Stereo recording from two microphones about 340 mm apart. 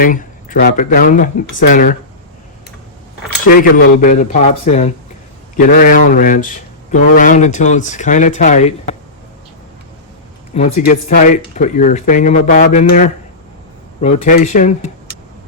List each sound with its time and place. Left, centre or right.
0.0 s speech: left
4.0 s speech: left
10.5 s speech: left